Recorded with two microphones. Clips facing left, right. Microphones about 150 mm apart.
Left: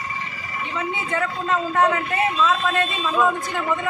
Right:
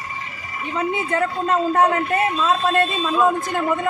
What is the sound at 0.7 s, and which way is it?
A man's voice, 45° right (ahead or behind).